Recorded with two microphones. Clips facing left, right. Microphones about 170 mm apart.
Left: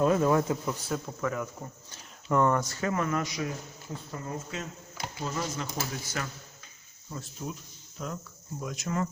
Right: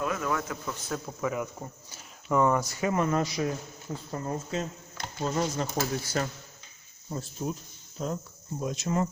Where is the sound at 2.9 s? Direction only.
25° right (ahead or behind).